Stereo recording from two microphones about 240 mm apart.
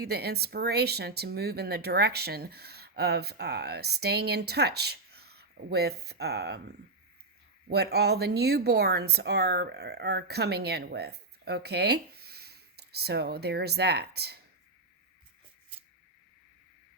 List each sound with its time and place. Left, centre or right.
0.0 s speech: right